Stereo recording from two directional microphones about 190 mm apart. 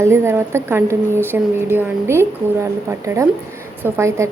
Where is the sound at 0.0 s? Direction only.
15° right (ahead or behind).